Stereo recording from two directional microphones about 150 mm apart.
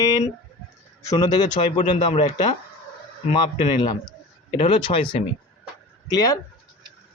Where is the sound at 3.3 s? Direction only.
30° left (ahead or behind).